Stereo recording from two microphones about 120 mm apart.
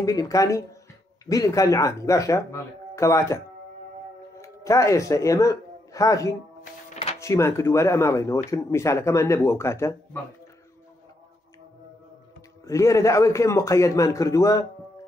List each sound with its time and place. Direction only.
0.0 s speech: 30° left (ahead or behind)
4.4 s a man's voice: 25° left (ahead or behind)
12.6 s speech: 25° left (ahead or behind)